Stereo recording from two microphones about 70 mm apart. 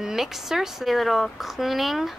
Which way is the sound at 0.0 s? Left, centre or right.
Centre.